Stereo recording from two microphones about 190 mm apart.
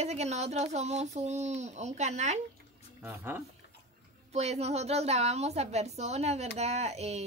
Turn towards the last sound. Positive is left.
turn(degrees=-35)  # may be behind; listen again after turning